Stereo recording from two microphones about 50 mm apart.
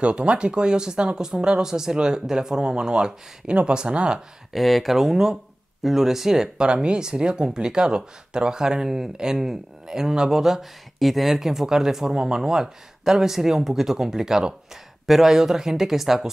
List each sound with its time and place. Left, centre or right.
0.0 s speech: right
4.5 s speech: centre